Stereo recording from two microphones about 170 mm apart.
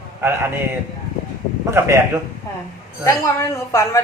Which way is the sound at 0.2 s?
15° right (ahead or behind).